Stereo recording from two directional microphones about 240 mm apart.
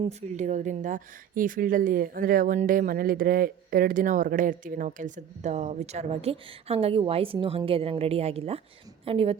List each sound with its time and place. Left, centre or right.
0.0 s a woman's voice: right